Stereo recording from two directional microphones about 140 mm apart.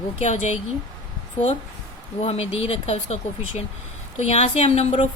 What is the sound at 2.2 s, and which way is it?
Speech, 50° left (ahead or behind).